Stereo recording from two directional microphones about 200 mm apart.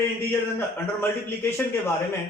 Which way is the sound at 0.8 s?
10° left (ahead or behind).